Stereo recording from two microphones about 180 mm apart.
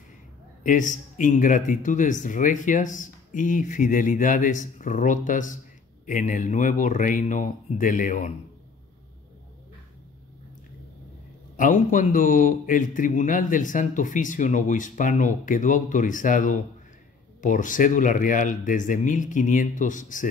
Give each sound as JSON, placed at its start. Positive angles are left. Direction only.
{"t": 0.7, "sound": "a man's voice", "side_deg": 45}
{"t": 11.5, "sound": "a man's voice", "side_deg": 45}